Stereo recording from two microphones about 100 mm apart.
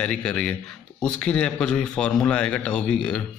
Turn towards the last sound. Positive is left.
turn(degrees=10)  # may be behind; listen again after turning